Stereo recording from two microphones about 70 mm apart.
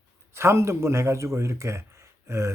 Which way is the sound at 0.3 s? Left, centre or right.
Right.